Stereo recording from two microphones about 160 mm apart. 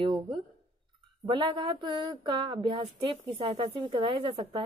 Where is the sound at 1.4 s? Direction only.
30° right (ahead or behind).